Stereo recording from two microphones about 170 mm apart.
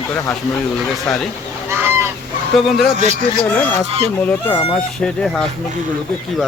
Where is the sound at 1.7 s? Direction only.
15° right (ahead or behind).